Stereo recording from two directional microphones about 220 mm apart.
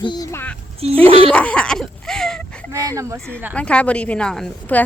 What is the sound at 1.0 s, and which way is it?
Speech, 25° right (ahead or behind).